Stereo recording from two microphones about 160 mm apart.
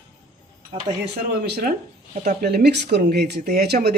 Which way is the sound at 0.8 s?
90° right.